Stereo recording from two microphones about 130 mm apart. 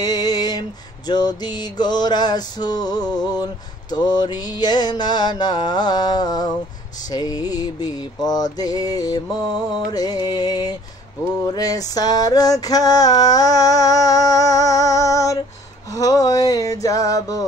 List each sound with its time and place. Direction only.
0.0 s mantra: 30° left (ahead or behind)
11.4 s music: 30° left (ahead or behind)
15.9 s a sound: 25° left (ahead or behind)